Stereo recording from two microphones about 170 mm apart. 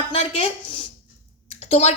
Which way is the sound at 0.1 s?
35° left (ahead or behind).